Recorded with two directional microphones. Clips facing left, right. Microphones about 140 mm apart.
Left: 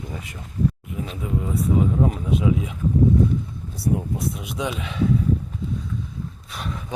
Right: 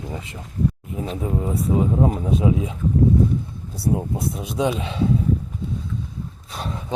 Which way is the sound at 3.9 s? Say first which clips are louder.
Right 1 dB; 30° right (ahead or behind).